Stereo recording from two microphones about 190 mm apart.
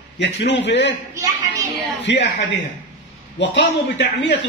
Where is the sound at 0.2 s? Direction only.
65° left (ahead or behind).